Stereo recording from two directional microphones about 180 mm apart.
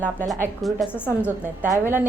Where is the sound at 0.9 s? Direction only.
10° left (ahead or behind).